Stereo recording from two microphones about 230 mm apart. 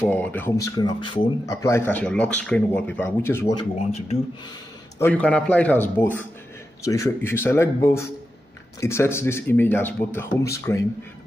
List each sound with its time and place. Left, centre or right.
0.0 s speech: centre
3.7 s speech: left
4.9 s speech: centre